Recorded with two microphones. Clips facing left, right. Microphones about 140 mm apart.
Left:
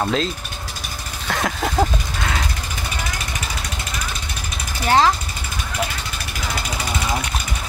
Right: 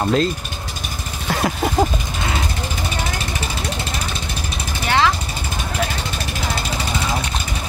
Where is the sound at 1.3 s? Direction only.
10° right (ahead or behind).